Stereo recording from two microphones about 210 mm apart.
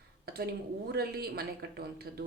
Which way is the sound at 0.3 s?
50° right (ahead or behind).